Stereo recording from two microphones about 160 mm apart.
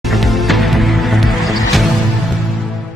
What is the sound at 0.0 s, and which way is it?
Music, centre (ahead or behind).